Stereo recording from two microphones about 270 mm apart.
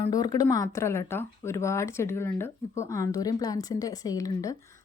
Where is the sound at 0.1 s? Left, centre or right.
Centre.